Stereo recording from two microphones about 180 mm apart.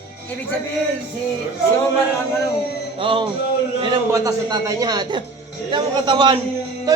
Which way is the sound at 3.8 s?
20° right (ahead or behind).